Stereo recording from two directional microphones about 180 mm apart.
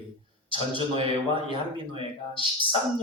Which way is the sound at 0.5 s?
30° right (ahead or behind).